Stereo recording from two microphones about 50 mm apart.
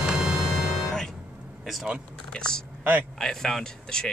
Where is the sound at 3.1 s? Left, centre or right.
Centre.